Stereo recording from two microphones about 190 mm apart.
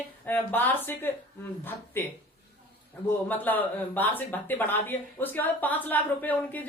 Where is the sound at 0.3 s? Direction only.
10° left (ahead or behind).